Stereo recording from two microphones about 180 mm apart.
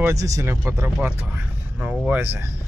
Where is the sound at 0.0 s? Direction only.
20° right (ahead or behind).